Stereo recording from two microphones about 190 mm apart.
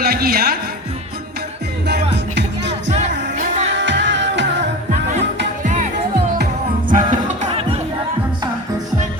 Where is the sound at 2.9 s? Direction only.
35° right (ahead or behind).